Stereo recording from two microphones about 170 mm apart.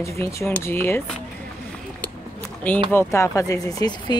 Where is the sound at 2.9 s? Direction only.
15° left (ahead or behind).